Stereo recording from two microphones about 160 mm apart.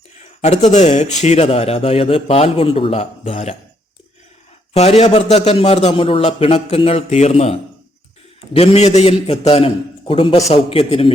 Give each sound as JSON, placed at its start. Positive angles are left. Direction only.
{"t": 0.4, "sound": "a man's voice", "side_deg": 45}
{"t": 4.7, "sound": "a man's voice", "side_deg": 40}